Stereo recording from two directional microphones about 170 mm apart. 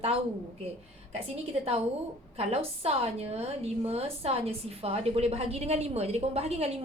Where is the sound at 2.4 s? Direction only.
35° right (ahead or behind).